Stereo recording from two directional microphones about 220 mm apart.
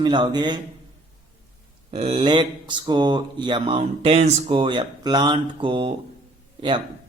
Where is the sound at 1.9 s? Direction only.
25° right (ahead or behind).